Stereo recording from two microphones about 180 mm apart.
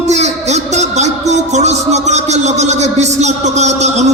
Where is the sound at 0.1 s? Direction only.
40° right (ahead or behind).